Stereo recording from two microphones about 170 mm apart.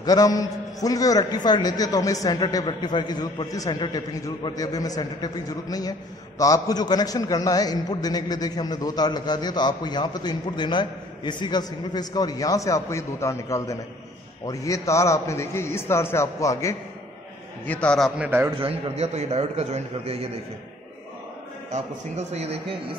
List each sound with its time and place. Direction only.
0.0 s a man's voice: 20° left (ahead or behind)
17.6 s a man's voice: 5° left (ahead or behind); by 18.5 s 10° right (ahead or behind)
18.6 s a man's voice: 35° right (ahead or behind)
21.6 s a man's voice: 45° right (ahead or behind)